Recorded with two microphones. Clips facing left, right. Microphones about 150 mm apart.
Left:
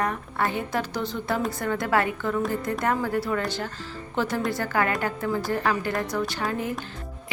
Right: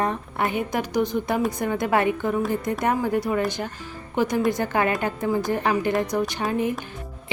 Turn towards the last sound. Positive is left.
turn(degrees=-20)  # may be behind; listen again after turning